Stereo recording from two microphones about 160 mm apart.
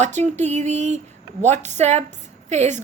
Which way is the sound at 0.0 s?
45° right (ahead or behind).